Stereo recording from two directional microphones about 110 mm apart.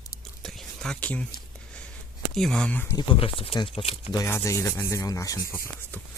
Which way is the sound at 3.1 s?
60° left (ahead or behind).